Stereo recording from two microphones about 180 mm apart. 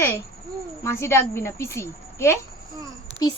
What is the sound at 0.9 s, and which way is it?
A child's voice, 15° left (ahead or behind).